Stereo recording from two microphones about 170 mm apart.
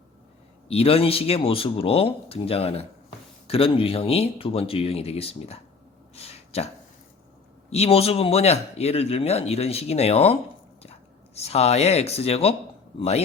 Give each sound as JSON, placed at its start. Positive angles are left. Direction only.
{"t": 0.7, "sound": "a man's voice", "side_deg": 35}
{"t": 6.1, "sound": "a sound", "side_deg": 35}
{"t": 7.7, "sound": "a man's voice", "side_deg": 35}
{"t": 11.3, "sound": "a man's voice", "side_deg": 40}